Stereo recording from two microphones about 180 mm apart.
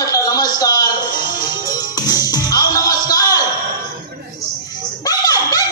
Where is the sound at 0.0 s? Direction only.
20° left (ahead or behind).